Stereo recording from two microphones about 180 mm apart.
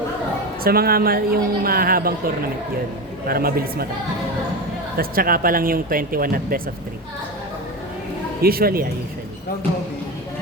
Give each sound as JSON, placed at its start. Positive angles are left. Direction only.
{"t": 0.6, "sound": "a woman's voice", "side_deg": -55}
{"t": 4.9, "sound": "speech", "side_deg": -55}
{"t": 8.4, "sound": "a woman's voice", "side_deg": -55}